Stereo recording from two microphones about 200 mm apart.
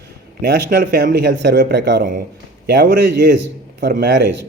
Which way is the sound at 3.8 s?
55° right (ahead or behind).